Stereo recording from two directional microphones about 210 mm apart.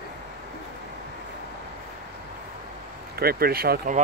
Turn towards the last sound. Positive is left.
turn(degrees=-45)  # may be behind; listen again after turning